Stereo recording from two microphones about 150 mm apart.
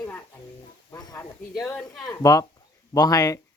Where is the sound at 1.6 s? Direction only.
20° left (ahead or behind).